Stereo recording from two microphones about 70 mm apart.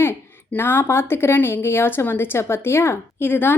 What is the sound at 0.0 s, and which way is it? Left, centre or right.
A woman's voice, left.